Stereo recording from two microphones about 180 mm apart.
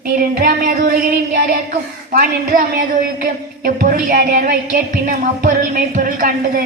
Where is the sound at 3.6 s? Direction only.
50° right (ahead or behind).